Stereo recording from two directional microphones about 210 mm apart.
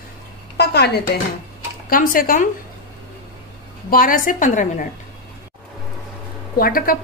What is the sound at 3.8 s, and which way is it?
A woman's voice, 40° left (ahead or behind).